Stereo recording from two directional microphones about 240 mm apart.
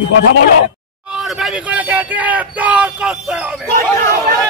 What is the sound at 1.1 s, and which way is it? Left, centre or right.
Speech, centre.